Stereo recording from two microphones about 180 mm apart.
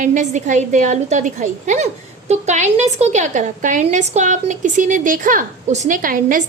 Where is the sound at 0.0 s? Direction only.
45° right (ahead or behind).